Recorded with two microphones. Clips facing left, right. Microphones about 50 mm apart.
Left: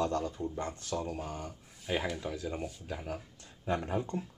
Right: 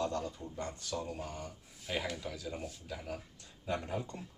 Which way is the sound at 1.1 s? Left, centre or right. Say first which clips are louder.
Left 3 dB; left.